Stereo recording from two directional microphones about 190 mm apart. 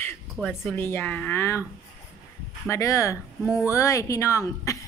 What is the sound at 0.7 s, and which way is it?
Speech, 10° left (ahead or behind).